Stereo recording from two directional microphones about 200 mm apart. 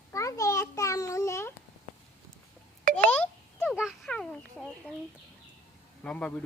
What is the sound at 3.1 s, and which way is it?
Chicken, 5° left (ahead or behind).